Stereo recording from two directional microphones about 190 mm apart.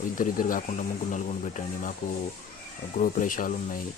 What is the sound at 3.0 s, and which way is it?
Speech, 45° left (ahead or behind).